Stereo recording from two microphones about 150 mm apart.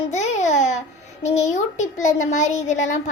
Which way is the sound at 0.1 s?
50° left (ahead or behind).